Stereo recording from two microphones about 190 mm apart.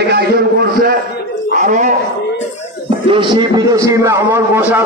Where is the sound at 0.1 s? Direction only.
55° right (ahead or behind).